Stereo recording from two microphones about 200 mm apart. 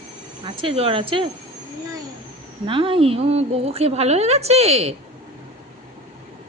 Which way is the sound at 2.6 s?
25° right (ahead or behind).